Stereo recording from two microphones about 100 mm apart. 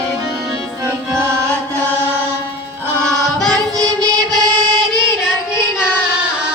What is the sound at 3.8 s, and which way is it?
Music, 40° right (ahead or behind).